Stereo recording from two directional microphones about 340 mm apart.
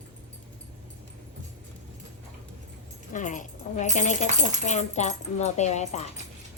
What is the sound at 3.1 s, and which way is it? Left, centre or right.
A woman's voice, left.